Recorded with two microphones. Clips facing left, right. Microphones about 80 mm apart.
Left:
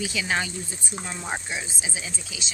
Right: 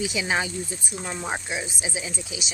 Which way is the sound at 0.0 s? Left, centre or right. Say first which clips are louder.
Right 1 dB; centre.